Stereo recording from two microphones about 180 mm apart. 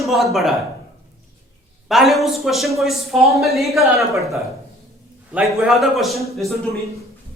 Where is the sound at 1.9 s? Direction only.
Centre (ahead or behind).